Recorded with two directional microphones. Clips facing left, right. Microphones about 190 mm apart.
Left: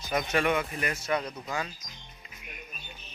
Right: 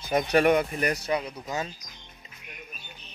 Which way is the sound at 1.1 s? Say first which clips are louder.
Right 1 dB; 10° right (ahead or behind).